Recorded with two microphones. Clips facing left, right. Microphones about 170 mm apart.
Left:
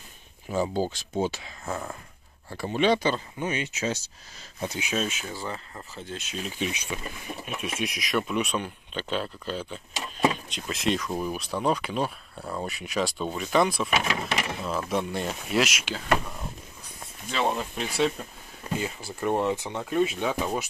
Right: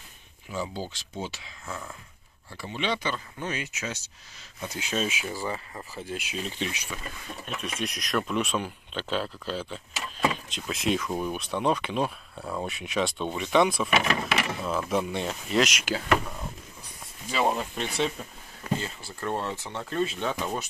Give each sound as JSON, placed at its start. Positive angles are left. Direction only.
{"t": 0.5, "sound": "speech", "side_deg": 45}
{"t": 3.3, "sound": "speech", "side_deg": 20}
{"t": 4.9, "sound": "speech", "side_deg": -5}
{"t": 6.6, "sound": "speech", "side_deg": 20}
{"t": 7.4, "sound": "speech", "side_deg": 5}
{"t": 18.8, "sound": "speech", "side_deg": 15}